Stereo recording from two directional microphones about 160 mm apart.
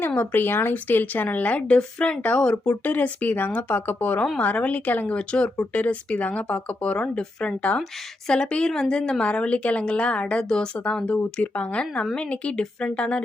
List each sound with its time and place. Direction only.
0.0 s a woman's voice: 10° left (ahead or behind)